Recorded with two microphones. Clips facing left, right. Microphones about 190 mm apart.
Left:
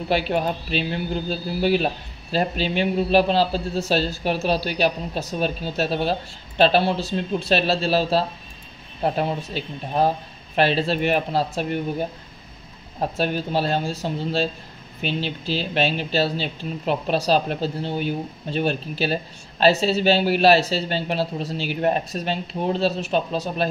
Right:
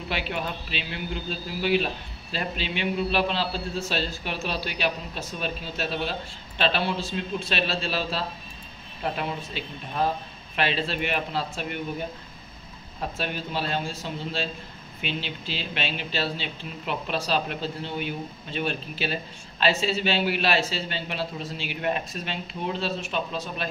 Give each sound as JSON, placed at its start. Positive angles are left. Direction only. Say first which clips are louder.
{"t": 0.1, "sound": "speech", "louder": "left 9 dB", "side_deg": 40}
{"t": 13.2, "sound": "speech", "louder": "left 8 dB", "side_deg": 40}